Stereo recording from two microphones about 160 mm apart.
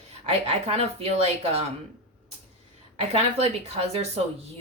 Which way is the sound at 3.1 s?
40° right (ahead or behind).